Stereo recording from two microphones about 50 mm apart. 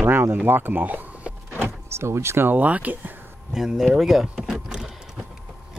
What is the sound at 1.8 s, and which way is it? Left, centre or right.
Speech, right.